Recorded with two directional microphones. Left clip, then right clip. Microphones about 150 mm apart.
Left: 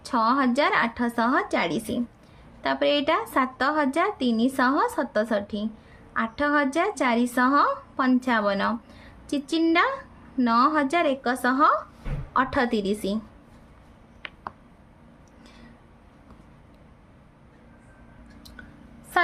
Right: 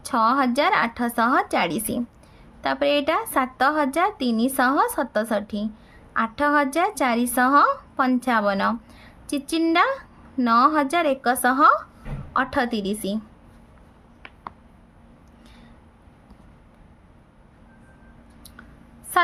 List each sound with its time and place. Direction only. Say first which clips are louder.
0.0 s speech: right 3 dB; 30° right (ahead or behind)
12.3 s a woman's voice: even; 20° right (ahead or behind)
19.1 s a sound: right 3 dB; 35° right (ahead or behind)